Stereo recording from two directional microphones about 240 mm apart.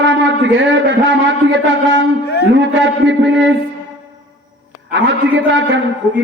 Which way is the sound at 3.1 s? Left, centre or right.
Right.